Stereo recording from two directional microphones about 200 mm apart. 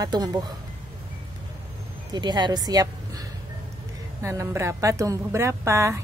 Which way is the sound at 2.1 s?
20° right (ahead or behind).